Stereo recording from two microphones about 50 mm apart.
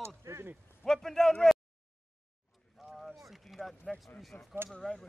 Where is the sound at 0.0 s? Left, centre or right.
Right.